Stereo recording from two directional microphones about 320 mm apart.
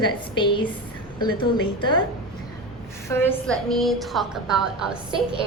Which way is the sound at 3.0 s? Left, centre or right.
Centre.